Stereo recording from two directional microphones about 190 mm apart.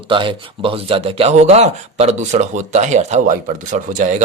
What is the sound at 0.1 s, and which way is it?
Speech, 25° right (ahead or behind).